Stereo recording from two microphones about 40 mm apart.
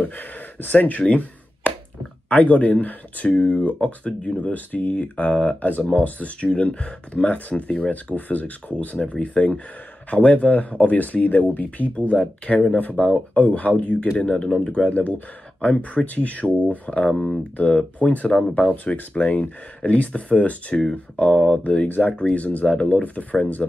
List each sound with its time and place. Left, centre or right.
0.0 s speech: left
1.0 s a sound: left
2.2 s speech: left